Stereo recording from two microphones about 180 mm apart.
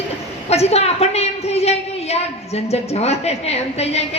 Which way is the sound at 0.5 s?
35° left (ahead or behind).